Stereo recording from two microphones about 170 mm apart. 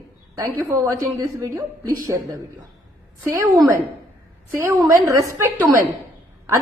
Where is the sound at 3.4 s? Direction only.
20° right (ahead or behind).